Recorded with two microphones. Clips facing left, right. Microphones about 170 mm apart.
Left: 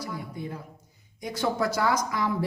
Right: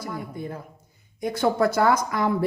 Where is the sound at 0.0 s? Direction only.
50° right (ahead or behind).